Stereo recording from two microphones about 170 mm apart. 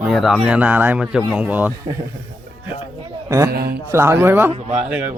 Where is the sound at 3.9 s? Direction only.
15° right (ahead or behind).